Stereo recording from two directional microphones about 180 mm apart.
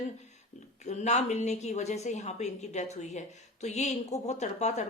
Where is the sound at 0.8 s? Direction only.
40° left (ahead or behind).